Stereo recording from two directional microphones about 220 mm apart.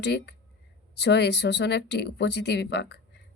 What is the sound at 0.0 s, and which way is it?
Speech, 50° left (ahead or behind).